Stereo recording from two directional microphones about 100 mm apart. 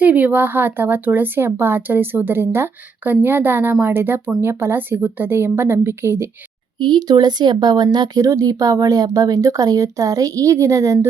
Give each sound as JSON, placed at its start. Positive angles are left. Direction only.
{"t": 0.0, "sound": "speech", "side_deg": -15}
{"t": 6.7, "sound": "speech", "side_deg": -50}